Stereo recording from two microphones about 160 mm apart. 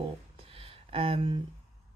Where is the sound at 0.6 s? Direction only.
35° right (ahead or behind).